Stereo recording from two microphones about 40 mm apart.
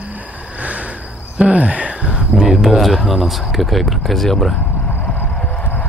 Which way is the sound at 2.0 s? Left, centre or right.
Right.